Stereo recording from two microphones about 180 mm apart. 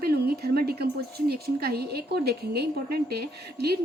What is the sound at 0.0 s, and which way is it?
A woman's voice, 60° right (ahead or behind).